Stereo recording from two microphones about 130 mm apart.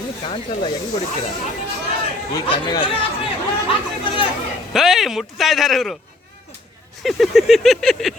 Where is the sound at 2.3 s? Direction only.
35° left (ahead or behind).